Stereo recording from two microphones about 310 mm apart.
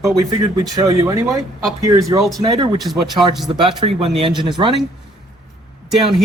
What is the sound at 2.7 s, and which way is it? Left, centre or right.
Speech, centre.